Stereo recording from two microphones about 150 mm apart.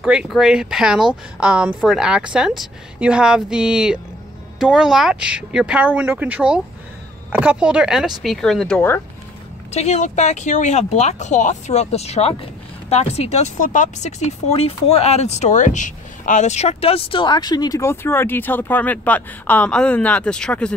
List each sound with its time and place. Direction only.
0.0 s speech: 5° right (ahead or behind); by 9.0 s 10° left (ahead or behind)
9.7 s speech: 45° left (ahead or behind); by 20.7 s 5° left (ahead or behind)